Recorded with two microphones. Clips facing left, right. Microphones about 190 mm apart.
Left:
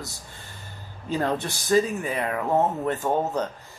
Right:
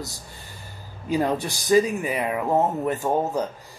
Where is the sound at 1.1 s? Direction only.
10° right (ahead or behind).